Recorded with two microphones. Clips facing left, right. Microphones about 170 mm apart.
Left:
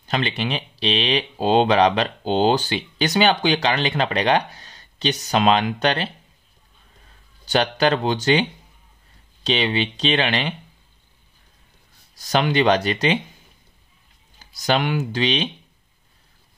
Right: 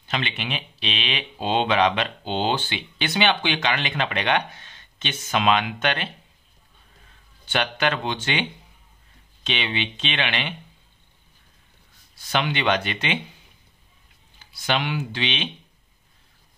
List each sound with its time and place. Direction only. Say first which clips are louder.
0.0 s speech: left 5 dB; 40° left (ahead or behind)
7.4 s speech: left 5 dB; 35° left (ahead or behind)
12.2 s speech: left 6 dB; 40° left (ahead or behind)
14.4 s speech: left 4 dB; 40° left (ahead or behind)